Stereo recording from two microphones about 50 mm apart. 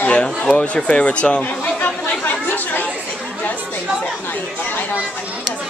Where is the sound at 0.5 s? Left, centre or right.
Left.